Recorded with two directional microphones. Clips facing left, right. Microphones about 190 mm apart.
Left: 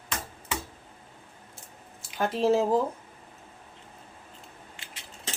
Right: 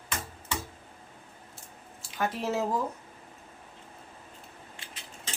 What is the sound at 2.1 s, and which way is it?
Speech, 30° left (ahead or behind).